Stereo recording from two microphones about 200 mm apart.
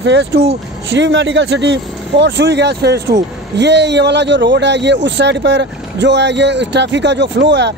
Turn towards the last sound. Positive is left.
turn(degrees=-60)  # may be behind; listen again after turning